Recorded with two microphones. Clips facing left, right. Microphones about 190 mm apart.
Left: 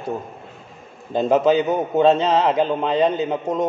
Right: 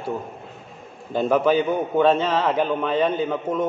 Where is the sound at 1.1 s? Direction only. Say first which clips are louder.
Left 2 dB; 20° left (ahead or behind).